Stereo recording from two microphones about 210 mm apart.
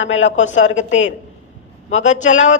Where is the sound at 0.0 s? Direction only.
65° left (ahead or behind).